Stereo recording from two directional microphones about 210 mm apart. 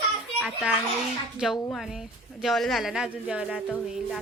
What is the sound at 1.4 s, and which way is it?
A woman's voice, centre (ahead or behind).